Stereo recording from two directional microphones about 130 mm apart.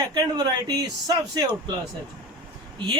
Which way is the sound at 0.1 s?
30° right (ahead or behind).